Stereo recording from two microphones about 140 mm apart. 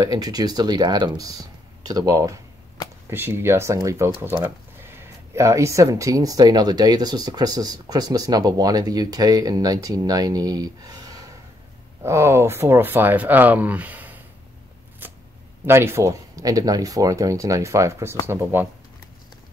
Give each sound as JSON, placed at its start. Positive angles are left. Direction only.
{"t": 0.0, "sound": "speech", "side_deg": -30}
{"t": 15.0, "sound": "shuffling cards", "side_deg": -15}
{"t": 15.6, "sound": "speech", "side_deg": -15}